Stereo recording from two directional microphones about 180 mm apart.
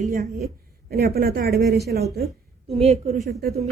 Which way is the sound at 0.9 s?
60° right (ahead or behind).